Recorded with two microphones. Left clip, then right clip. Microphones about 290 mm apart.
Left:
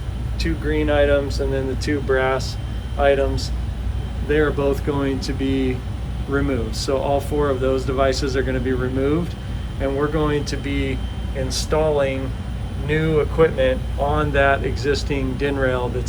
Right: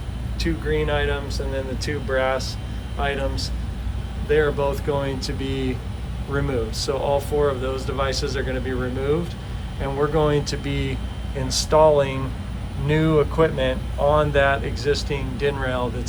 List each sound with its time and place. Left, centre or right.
0.3 s speech: centre